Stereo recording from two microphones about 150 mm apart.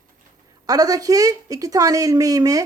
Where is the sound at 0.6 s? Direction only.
25° right (ahead or behind).